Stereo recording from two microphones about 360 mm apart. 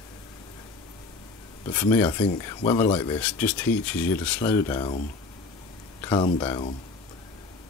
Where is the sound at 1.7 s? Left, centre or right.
Centre.